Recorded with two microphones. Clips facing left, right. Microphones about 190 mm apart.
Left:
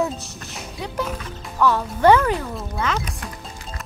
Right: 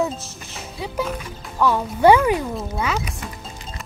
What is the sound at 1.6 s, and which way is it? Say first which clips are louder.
Speech: right 1 dB; 10° right (ahead or behind).